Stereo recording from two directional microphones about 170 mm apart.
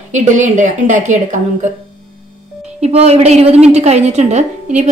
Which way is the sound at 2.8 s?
40° right (ahead or behind).